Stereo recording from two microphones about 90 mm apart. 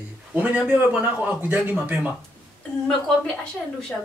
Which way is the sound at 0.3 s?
15° right (ahead or behind).